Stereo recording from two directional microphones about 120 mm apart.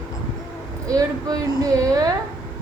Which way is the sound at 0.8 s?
30° right (ahead or behind).